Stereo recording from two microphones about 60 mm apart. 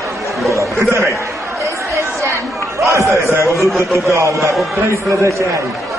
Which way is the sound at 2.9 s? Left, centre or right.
Right.